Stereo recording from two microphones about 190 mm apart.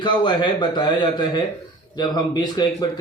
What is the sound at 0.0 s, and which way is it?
Speech, 25° left (ahead or behind).